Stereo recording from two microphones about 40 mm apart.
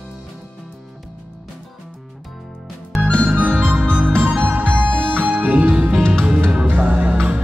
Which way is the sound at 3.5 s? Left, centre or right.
Right.